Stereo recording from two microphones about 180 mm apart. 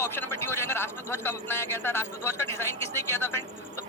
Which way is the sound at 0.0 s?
15° left (ahead or behind).